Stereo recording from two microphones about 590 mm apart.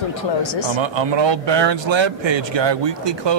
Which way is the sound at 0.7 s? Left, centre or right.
Right.